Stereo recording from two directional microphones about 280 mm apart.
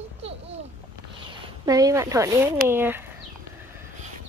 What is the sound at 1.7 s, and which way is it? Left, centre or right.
Speech, centre.